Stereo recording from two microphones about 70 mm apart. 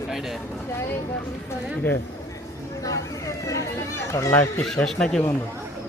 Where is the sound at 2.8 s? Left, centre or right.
Left.